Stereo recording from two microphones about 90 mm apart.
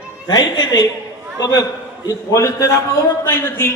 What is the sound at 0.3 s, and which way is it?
A man's voice, 45° left (ahead or behind).